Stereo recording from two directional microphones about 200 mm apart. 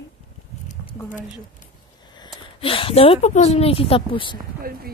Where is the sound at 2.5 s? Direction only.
25° left (ahead or behind).